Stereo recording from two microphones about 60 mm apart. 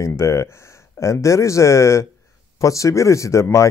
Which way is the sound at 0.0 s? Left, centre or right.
Left.